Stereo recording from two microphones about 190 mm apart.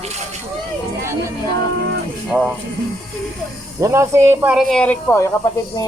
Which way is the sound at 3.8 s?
15° right (ahead or behind).